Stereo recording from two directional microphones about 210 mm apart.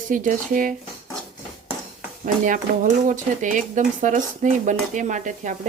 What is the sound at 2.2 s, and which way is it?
Speech, 40° right (ahead or behind).